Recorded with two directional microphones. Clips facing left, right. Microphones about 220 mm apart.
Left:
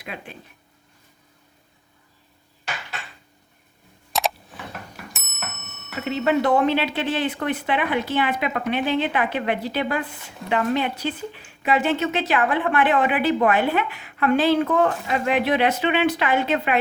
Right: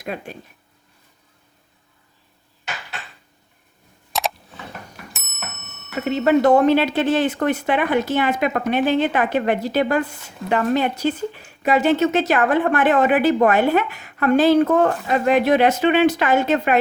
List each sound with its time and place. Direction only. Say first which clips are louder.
0.0 s speech: right 6 dB; 45° right (ahead or behind)
4.1 s a sound: even; centre (ahead or behind)
5.1 s clock: right 1 dB; centre (ahead or behind)
6.1 s speech: right 5 dB; 40° right (ahead or behind)